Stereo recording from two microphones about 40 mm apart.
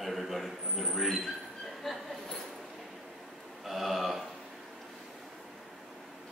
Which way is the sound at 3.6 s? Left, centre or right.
Centre.